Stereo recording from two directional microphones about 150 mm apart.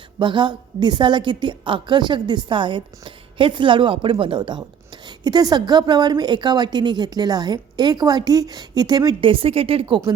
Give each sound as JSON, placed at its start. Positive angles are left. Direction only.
{"t": 0.2, "sound": "a woman's voice", "side_deg": -30}